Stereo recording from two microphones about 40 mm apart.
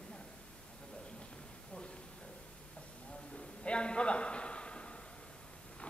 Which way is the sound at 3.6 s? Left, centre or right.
Left.